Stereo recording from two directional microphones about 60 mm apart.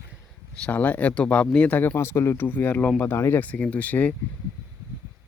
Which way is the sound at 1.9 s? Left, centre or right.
Left.